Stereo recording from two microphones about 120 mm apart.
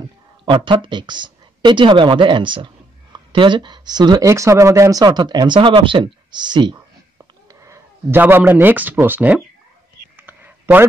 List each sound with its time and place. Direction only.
0.5 s speech: 45° right (ahead or behind)
7.2 s a sound: 25° right (ahead or behind)
8.2 s speech: 15° right (ahead or behind)
10.1 s whispering: 15° right (ahead or behind)